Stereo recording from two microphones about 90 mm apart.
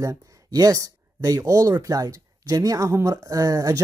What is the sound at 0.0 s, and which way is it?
Speech, 35° right (ahead or behind).